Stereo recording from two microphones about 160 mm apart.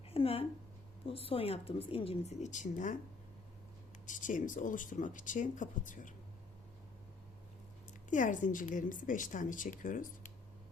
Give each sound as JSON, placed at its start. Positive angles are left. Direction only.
{"t": 0.1, "sound": "a woman's voice", "side_deg": 35}
{"t": 4.0, "sound": "a woman's voice", "side_deg": 55}
{"t": 8.1, "sound": "a woman's voice", "side_deg": 50}